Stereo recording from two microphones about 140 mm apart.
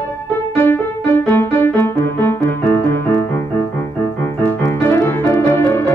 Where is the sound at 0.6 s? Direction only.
15° left (ahead or behind).